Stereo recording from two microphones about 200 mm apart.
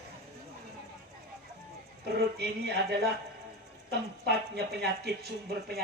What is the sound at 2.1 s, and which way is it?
Speech, 55° right (ahead or behind).